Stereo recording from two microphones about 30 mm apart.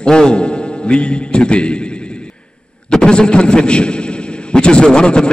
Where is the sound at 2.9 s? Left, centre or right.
Left.